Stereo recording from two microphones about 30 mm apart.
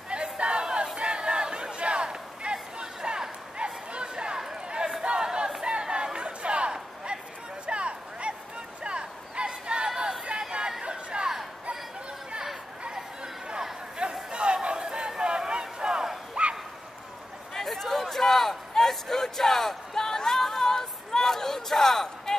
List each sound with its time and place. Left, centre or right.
0.1 s a sound: right
0.9 s crowd: right
2.5 s chatter: right
4.6 s crowd: right
5.0 s battle cry: right
5.6 s chatter: right
7.6 s a sound: right
8.8 s chatter: right
14.0 s chatter: right
14.3 s a sound: right
16.4 s bow-wow: right
17.6 s a sound: centre